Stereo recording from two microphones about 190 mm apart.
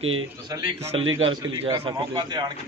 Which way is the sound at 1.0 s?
90° right.